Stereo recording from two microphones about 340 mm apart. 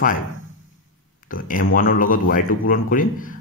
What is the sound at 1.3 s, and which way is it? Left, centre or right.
Speech, left.